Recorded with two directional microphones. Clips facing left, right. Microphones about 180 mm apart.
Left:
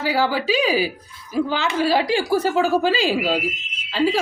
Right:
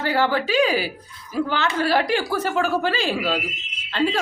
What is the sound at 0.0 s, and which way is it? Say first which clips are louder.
A woman's voice: even; 10° left (ahead or behind).